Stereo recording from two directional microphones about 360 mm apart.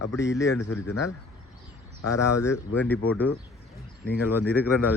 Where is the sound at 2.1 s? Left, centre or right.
Left.